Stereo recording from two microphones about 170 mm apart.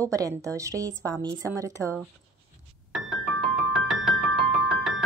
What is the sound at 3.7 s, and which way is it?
Music, 5° right (ahead or behind).